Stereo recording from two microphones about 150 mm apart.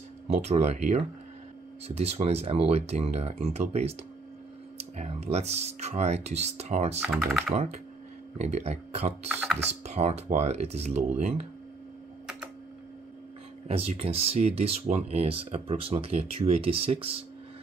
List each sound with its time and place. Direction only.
0.3 s speech: 45° right (ahead or behind)
13.7 s speech: 45° right (ahead or behind)